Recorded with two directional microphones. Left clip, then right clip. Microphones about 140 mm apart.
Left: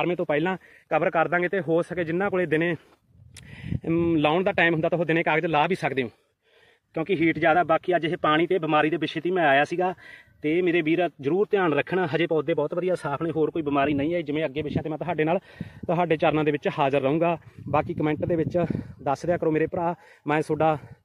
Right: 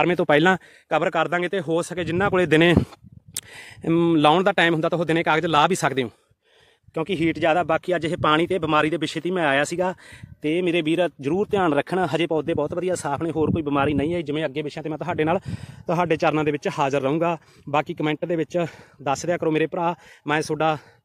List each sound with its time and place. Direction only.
1.0 s speech: 45° right (ahead or behind)
2.0 s speech: 80° right
3.8 s a man's voice: 80° right; by 6.1 s 55° right (ahead or behind)
6.9 s speech: 35° right (ahead or behind); by 19.4 s 15° right (ahead or behind)
19.4 s speech: 40° right (ahead or behind)
20.2 s a man's voice: centre (ahead or behind)